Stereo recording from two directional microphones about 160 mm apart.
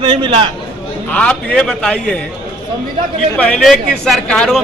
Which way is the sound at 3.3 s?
5° left (ahead or behind).